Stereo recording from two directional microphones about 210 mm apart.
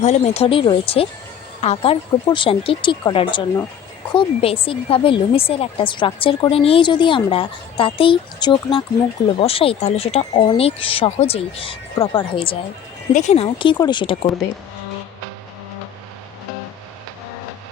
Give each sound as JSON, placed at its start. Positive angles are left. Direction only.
{"t": 0.0, "sound": "a woman's voice", "side_deg": 30}